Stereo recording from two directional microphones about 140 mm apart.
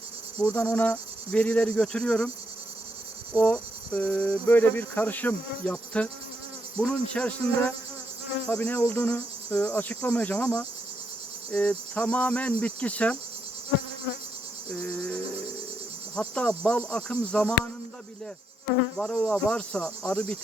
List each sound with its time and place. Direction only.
0.6 s cricket: 10° left (ahead or behind)
3.3 s cricket: 10° left (ahead or behind)
14.7 s cricket: 10° left (ahead or behind)
18.9 s cricket: 5° left (ahead or behind)